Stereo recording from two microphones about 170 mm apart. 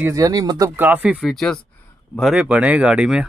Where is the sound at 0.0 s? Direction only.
20° right (ahead or behind).